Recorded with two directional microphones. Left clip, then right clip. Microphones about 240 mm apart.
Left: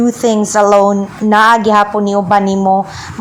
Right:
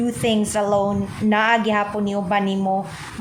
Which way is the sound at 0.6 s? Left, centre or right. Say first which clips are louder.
Left 14 dB; left.